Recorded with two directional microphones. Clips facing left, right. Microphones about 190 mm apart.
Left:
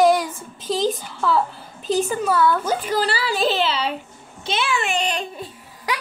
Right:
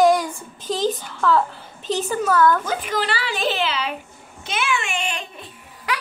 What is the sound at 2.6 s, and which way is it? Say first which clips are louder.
A woman's voice: left 3 dB; 35° left (ahead or behind).